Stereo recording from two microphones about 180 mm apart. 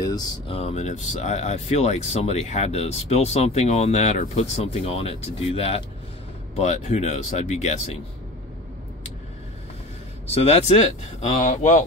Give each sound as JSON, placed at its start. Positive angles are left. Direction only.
{"t": 0.0, "sound": "speech", "side_deg": 20}
{"t": 0.6, "sound": "speech", "side_deg": 35}
{"t": 10.2, "sound": "speech", "side_deg": 35}